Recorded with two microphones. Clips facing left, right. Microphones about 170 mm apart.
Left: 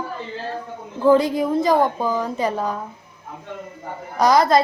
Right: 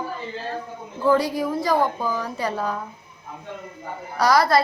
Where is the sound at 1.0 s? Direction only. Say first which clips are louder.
Left 4 dB; 20° left (ahead or behind).